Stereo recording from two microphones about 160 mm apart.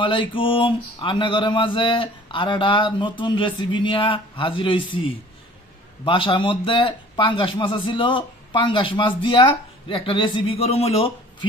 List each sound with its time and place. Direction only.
0.0 s a man's voice: 30° left (ahead or behind)